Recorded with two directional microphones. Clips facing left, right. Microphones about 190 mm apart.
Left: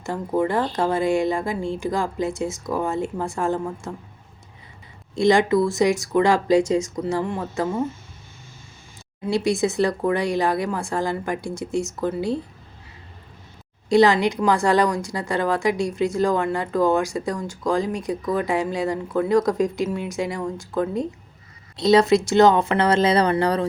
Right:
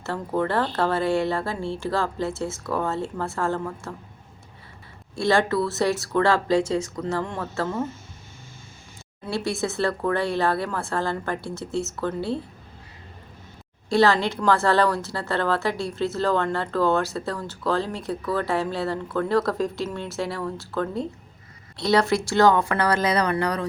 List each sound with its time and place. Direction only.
0.0 s a woman's voice: 15° left (ahead or behind)
5.1 s a woman's voice: 15° left (ahead or behind)
9.2 s a woman's voice: 15° left (ahead or behind)
13.9 s a woman's voice: 15° left (ahead or behind)